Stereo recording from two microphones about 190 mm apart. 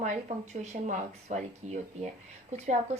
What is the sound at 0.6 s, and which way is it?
Speech, 35° right (ahead or behind).